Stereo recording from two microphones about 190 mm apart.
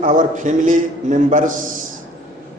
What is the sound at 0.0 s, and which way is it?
A man's voice, 40° right (ahead or behind).